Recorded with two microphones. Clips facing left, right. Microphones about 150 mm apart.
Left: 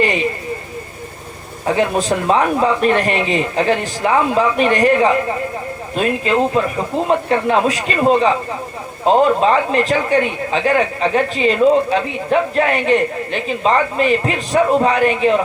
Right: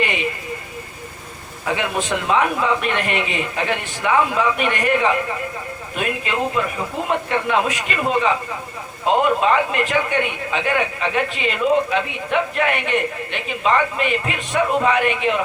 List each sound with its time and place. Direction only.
0.0 s a man's voice: 35° left (ahead or behind)
1.6 s a man's voice: 35° left (ahead or behind)